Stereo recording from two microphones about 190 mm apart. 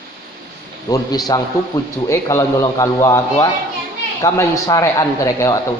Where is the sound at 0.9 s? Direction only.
20° left (ahead or behind).